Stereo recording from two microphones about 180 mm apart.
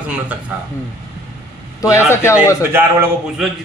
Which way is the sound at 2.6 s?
10° right (ahead or behind).